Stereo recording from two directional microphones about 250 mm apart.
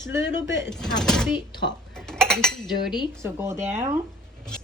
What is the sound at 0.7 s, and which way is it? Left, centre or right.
Speech, centre.